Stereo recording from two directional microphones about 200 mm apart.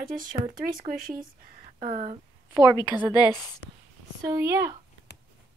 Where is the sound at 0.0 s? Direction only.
45° right (ahead or behind).